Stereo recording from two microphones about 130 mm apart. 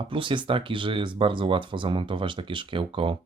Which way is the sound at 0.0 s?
40° right (ahead or behind).